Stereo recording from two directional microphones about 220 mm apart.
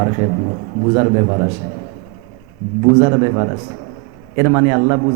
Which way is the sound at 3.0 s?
25° right (ahead or behind).